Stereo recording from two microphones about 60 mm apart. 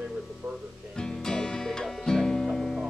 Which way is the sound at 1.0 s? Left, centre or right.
Centre.